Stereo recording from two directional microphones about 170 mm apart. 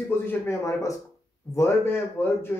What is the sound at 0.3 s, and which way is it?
Speech, 15° left (ahead or behind).